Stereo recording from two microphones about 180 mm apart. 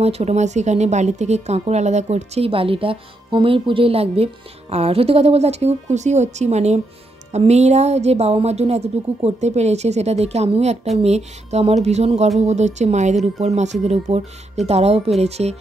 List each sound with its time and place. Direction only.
0.0 s speech: 35° right (ahead or behind)